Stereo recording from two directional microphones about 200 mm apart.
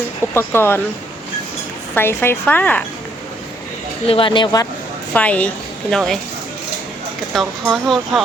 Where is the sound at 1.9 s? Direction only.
10° left (ahead or behind).